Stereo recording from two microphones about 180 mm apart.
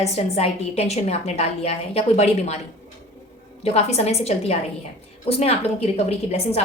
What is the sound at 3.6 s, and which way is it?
A woman's voice, 35° left (ahead or behind).